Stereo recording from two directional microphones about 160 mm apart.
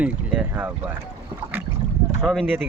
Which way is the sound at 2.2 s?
Centre (ahead or behind).